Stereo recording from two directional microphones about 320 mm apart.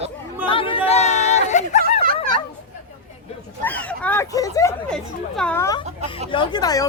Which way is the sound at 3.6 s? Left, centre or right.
Centre.